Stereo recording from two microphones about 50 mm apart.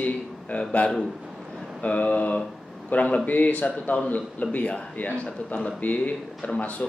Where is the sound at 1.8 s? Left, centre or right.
Left.